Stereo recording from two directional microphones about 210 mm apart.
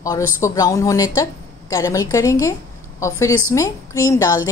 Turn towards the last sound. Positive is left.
turn(degrees=15)  # may be behind; listen again after turning